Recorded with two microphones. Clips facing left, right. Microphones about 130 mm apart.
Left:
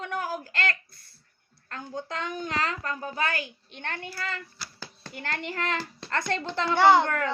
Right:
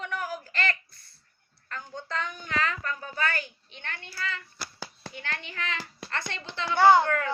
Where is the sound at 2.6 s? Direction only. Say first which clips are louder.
Left 1 dB; 35° left (ahead or behind).